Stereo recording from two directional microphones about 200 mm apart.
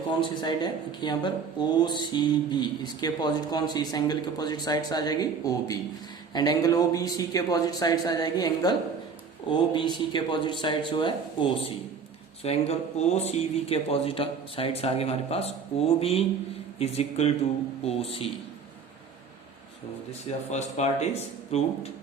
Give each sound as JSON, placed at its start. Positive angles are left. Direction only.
{"t": 0.2, "sound": "speech", "side_deg": 20}
{"t": 20.5, "sound": "speech", "side_deg": 35}